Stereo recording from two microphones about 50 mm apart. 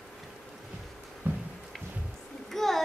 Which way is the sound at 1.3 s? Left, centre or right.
Right.